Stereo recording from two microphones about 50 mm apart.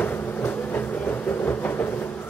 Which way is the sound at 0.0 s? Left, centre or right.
Left.